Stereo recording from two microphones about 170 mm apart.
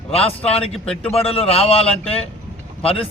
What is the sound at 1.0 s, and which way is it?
Speech, 35° left (ahead or behind).